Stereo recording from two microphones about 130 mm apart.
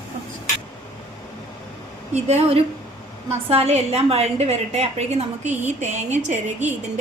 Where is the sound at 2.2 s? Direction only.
55° right (ahead or behind).